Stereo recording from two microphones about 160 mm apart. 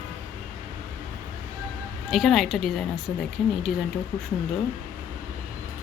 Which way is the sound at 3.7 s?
65° left (ahead or behind).